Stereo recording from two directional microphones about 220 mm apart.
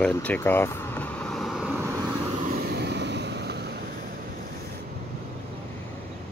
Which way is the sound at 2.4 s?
45° right (ahead or behind).